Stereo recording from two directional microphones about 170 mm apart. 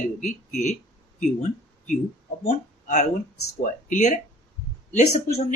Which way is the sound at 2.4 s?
45° left (ahead or behind).